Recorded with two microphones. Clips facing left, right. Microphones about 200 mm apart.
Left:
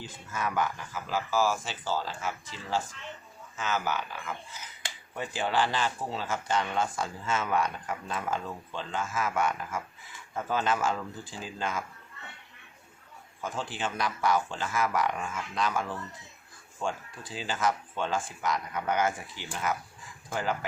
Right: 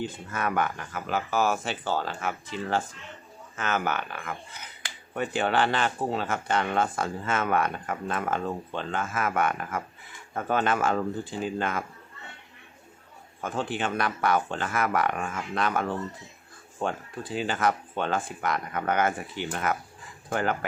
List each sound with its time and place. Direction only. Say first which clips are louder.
0.0 s speech: right 4 dB; 60° right (ahead or behind)
13.4 s speech: right 4 dB; 60° right (ahead or behind)